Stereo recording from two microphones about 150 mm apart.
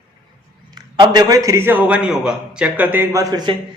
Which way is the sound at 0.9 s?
30° right (ahead or behind).